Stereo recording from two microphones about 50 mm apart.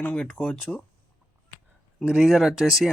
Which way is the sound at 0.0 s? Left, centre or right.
Left.